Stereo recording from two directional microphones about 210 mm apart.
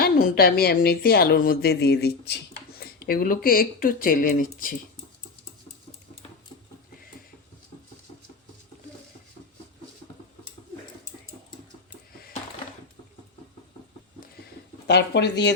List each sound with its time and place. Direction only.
0.0 s speech: 45° left (ahead or behind)
14.8 s speech: 55° left (ahead or behind)